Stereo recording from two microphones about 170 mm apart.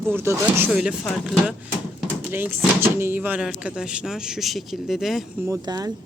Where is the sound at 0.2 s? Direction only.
15° right (ahead or behind).